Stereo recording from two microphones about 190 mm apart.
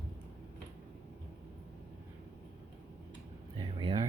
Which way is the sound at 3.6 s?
25° right (ahead or behind).